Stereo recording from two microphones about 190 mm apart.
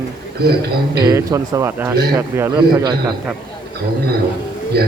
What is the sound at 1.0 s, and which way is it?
A man's voice, 15° right (ahead or behind).